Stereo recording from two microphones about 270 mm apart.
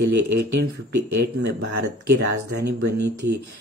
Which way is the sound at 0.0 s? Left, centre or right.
Right.